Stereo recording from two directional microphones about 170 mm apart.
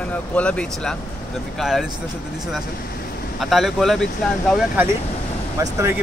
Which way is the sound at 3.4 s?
Centre (ahead or behind).